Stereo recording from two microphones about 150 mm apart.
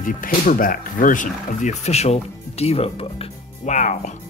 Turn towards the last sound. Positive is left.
turn(degrees=55)  # may be behind; listen again after turning